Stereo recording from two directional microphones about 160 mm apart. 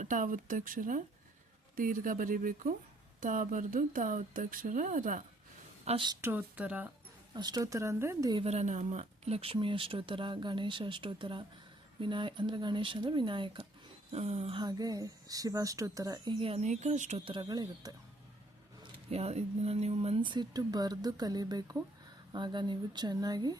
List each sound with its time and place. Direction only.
0.0 s speech: 55° right (ahead or behind)
5.8 s a woman's voice: 40° right (ahead or behind)
6.2 s speech: 10° right (ahead or behind)
7.3 s speech: 25° right (ahead or behind)
8.4 s speech: 45° right (ahead or behind); by 17.9 s 25° right (ahead or behind)
18.8 s speech: 40° right (ahead or behind); by 23.6 s 25° right (ahead or behind)